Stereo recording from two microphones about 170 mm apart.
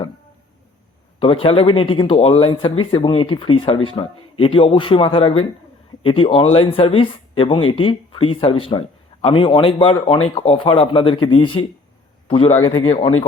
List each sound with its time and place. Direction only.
1.2 s speech: 30° left (ahead or behind)
12.9 s speech: 40° left (ahead or behind)